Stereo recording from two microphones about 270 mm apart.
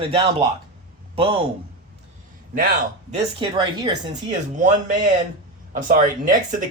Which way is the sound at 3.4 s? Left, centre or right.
Centre.